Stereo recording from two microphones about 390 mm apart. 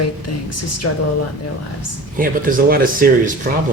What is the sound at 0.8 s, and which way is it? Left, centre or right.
Speech, left.